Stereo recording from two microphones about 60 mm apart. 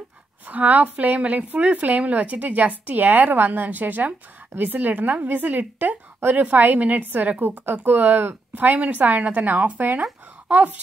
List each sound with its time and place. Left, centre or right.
0.5 s a woman's voice: right